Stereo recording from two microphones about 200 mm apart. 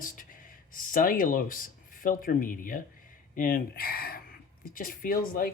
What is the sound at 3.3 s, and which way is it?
Speech, 45° left (ahead or behind).